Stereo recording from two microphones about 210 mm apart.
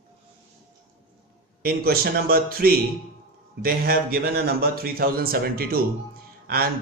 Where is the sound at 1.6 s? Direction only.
45° right (ahead or behind).